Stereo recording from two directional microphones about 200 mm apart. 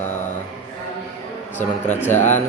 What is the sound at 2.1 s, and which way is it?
Speech, 35° left (ahead or behind).